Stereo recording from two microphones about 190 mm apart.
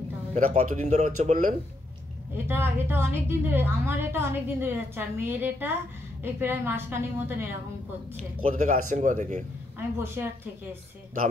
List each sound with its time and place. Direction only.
0.3 s speech: 40° right (ahead or behind)
2.3 s a woman's voice: 10° right (ahead or behind)
8.4 s speech: 35° right (ahead or behind)
9.9 s a woman's voice: 10° right (ahead or behind)